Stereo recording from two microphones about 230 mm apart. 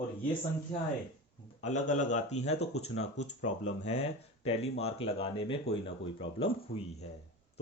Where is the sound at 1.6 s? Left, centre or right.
Left.